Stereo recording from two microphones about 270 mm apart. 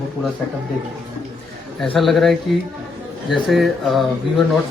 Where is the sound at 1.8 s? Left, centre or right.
Centre.